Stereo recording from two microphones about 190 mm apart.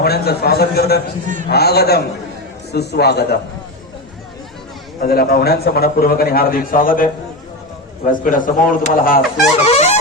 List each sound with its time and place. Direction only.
0.0 s a man's voice: 55° left (ahead or behind)
4.9 s a man's voice: 55° left (ahead or behind)
9.6 s music: 35° left (ahead or behind)